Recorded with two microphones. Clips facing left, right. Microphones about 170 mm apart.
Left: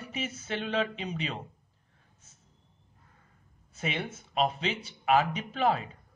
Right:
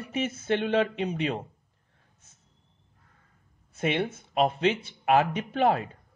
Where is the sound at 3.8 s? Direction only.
60° right (ahead or behind).